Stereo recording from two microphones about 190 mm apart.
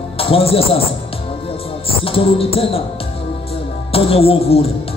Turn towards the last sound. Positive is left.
turn(degrees=30)  # may be behind; listen again after turning